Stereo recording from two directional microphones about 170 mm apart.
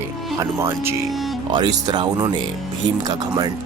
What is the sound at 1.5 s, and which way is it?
Speech, 25° right (ahead or behind).